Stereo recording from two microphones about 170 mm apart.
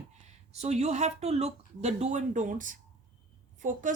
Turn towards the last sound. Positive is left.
turn(degrees=-50)  # may be behind; listen again after turning